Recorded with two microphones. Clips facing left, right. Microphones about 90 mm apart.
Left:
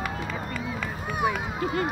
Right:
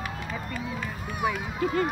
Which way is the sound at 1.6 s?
5° left (ahead or behind).